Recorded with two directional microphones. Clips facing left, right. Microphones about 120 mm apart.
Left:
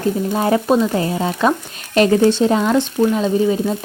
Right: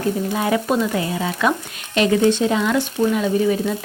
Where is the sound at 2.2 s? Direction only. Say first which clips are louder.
Left 3 dB; 35° left (ahead or behind).